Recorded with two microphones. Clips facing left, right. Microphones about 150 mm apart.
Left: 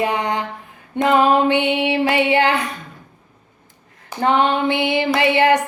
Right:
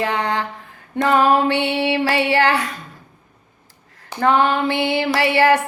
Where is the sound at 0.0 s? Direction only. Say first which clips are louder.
Left 1 dB; 15° left (ahead or behind).